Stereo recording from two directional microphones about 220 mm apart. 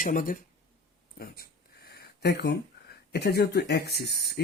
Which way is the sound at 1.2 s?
45° left (ahead or behind).